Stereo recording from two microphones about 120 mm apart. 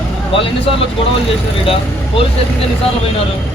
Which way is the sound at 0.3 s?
45° left (ahead or behind).